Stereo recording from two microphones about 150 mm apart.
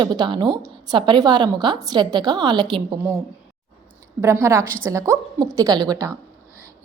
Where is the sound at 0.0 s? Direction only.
30° right (ahead or behind).